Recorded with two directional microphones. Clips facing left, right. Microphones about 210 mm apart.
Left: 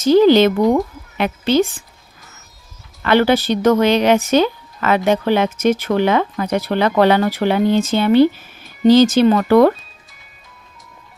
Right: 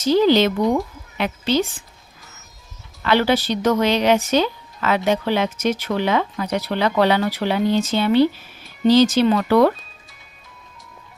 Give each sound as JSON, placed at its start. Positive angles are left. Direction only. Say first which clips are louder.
{"t": 0.0, "sound": "speech", "louder": "left 5 dB", "side_deg": 50}
{"t": 3.0, "sound": "speech", "louder": "left 4 dB", "side_deg": 55}